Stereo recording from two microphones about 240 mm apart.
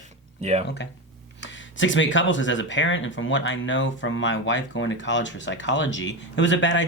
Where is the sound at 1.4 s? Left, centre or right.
Left.